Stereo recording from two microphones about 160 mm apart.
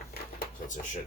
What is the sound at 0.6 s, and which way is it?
Speech, 55° left (ahead or behind).